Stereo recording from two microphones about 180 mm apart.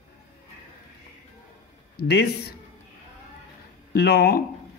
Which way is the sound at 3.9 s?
65° left (ahead or behind).